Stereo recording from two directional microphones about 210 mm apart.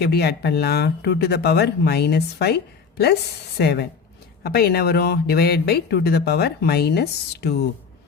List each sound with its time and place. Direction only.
0.0 s speech: 50° left (ahead or behind)
3.6 s speech: 50° left (ahead or behind)